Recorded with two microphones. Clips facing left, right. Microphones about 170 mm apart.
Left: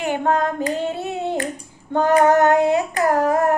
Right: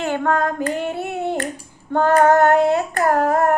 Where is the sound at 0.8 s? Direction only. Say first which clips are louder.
Even; 20° left (ahead or behind).